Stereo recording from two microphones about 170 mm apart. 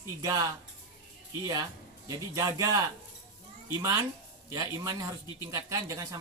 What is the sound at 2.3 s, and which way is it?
Speech, 20° right (ahead or behind).